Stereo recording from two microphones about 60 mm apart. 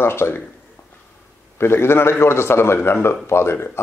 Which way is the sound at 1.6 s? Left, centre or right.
Left.